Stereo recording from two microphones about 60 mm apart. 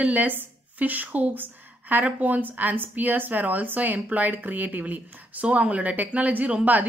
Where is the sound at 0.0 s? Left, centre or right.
Right.